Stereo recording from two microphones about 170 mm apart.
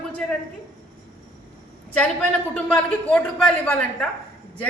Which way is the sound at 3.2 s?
5° left (ahead or behind).